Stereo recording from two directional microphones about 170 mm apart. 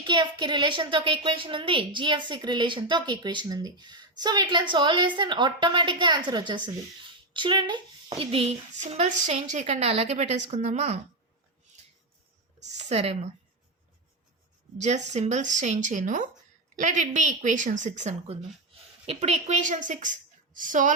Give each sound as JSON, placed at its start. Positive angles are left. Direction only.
{"t": 0.0, "sound": "a child's voice", "side_deg": -25}
{"t": 12.7, "sound": "speech", "side_deg": -40}
{"t": 14.8, "sound": "a woman's voice", "side_deg": -45}